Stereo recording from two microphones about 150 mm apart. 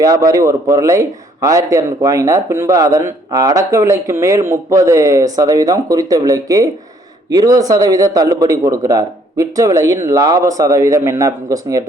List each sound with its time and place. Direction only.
0.0 s a man's voice: 20° right (ahead or behind)